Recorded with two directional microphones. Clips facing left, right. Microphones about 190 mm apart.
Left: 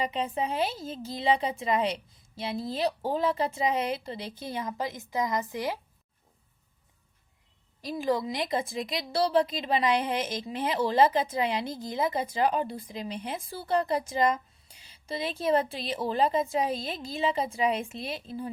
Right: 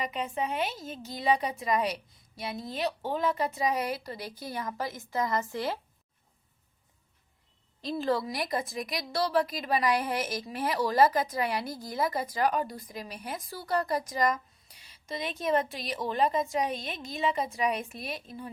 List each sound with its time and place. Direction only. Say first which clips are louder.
0.0 s a woman's voice: left 3 dB; 30° left (ahead or behind); by 5.8 s 15° left (ahead or behind)
7.8 s a woman's voice: left 1 dB; 10° left (ahead or behind); by 18.5 s 30° left (ahead or behind)